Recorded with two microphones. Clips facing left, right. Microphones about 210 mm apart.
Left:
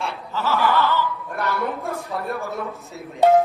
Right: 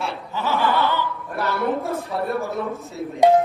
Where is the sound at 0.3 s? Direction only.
15° right (ahead or behind).